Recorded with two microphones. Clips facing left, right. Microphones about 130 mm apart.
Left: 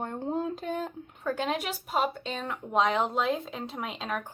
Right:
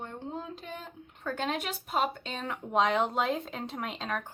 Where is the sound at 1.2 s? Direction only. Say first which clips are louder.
Left 3 dB; 10° left (ahead or behind).